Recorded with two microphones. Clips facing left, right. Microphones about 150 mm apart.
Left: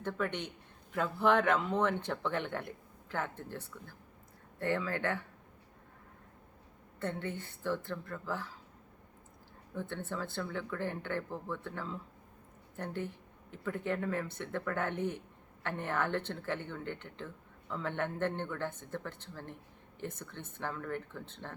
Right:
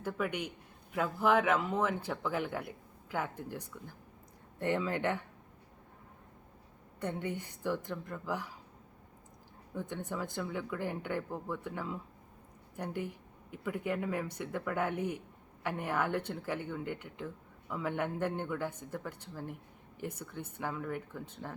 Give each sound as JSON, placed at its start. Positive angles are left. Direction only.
{"t": 0.0, "sound": "speech", "side_deg": -10}
{"t": 7.0, "sound": "speech", "side_deg": -15}
{"t": 9.7, "sound": "speech", "side_deg": -15}